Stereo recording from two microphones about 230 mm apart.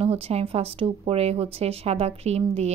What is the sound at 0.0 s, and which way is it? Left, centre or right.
Speech, right.